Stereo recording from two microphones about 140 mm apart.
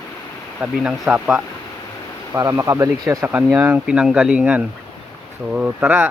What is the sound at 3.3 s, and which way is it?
Speech, 10° right (ahead or behind).